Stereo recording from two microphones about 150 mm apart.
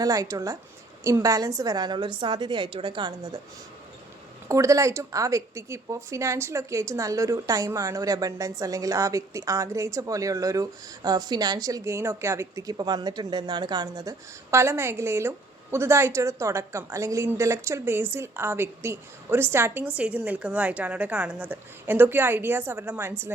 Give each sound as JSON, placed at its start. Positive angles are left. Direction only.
{"t": 0.0, "sound": "speech", "side_deg": -20}
{"t": 4.4, "sound": "a woman's voice", "side_deg": -20}